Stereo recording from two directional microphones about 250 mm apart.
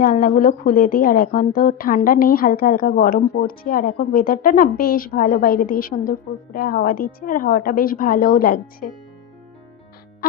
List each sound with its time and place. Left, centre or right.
0.0 s a woman's voice: left